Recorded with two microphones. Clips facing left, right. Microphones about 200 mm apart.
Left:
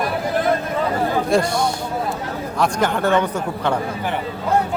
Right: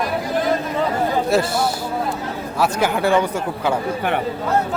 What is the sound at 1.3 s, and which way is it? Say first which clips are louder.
Speech: even; 5° right (ahead or behind).